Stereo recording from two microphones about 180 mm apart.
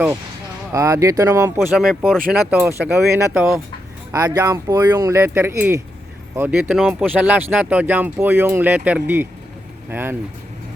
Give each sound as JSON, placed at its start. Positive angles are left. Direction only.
{"t": 0.7, "sound": "speech", "side_deg": -15}
{"t": 1.5, "sound": "speech", "side_deg": 0}